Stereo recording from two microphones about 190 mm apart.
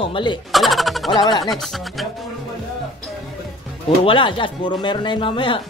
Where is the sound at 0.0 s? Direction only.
25° left (ahead or behind).